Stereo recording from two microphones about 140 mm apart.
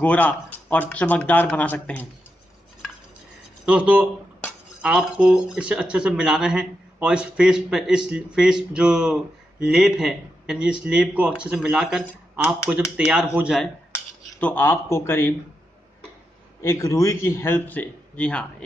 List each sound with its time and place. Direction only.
0.0 s speech: 10° left (ahead or behind)
3.6 s speech: 10° right (ahead or behind)
14.4 s speech: 15° left (ahead or behind)
16.6 s speech: 25° left (ahead or behind)